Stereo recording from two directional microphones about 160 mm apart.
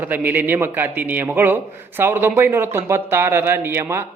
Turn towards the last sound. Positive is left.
turn(degrees=-15)  # may be behind; listen again after turning